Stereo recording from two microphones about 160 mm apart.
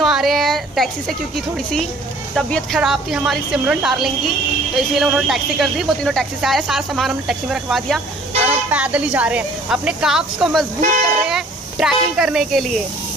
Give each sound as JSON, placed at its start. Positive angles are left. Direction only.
{"t": 0.0, "sound": "a sound", "side_deg": 0}
{"t": 2.3, "sound": "a woman's voice", "side_deg": 0}
{"t": 10.8, "sound": "speech", "side_deg": -55}
{"t": 11.2, "sound": "speech", "side_deg": -5}